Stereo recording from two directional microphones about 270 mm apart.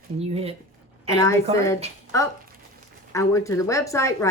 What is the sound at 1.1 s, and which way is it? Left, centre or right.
Speech, centre.